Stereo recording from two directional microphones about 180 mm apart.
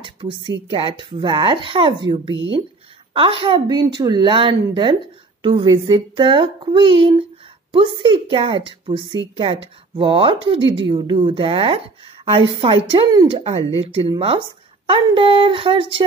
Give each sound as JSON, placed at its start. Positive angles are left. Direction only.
{"t": 0.0, "sound": "speech", "side_deg": -30}